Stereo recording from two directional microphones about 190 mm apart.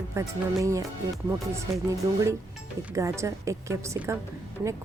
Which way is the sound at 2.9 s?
15° right (ahead or behind).